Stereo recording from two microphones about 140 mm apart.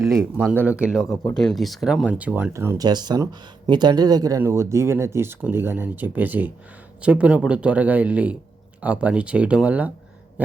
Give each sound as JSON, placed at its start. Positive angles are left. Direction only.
{"t": 0.5, "sound": "speech", "side_deg": -10}